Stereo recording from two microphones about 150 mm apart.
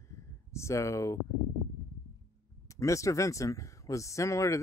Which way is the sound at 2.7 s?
20° left (ahead or behind).